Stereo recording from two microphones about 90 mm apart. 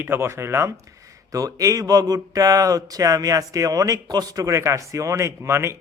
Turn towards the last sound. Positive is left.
turn(degrees=-30)  # may be behind; listen again after turning